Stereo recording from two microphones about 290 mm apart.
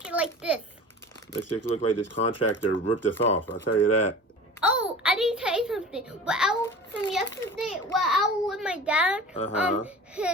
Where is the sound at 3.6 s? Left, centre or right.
Left.